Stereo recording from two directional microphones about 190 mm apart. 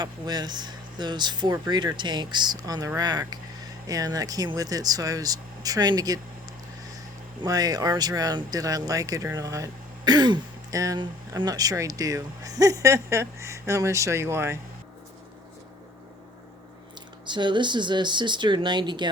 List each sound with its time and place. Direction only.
0.0 s speech: 20° right (ahead or behind)
7.4 s speech: 20° right (ahead or behind)
17.2 s speech: 25° right (ahead or behind)